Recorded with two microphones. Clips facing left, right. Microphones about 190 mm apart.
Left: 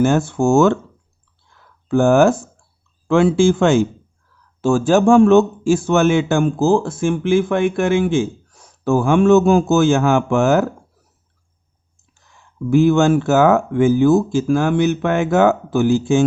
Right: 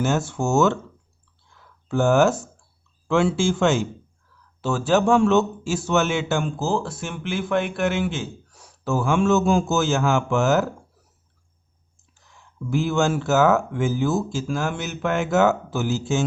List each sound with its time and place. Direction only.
0.0 s speech: 55° left (ahead or behind)
1.9 s a man's voice: 55° left (ahead or behind)
12.7 s speech: 60° left (ahead or behind)